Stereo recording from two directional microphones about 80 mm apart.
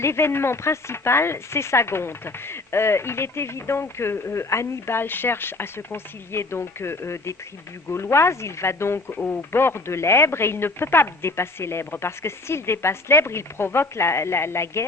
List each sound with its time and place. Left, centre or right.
0.0 s speech: left